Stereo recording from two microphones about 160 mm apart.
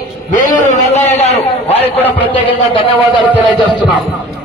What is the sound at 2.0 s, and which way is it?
Speech, 10° left (ahead or behind).